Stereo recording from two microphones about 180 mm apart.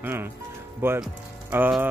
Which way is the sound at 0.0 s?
10° right (ahead or behind).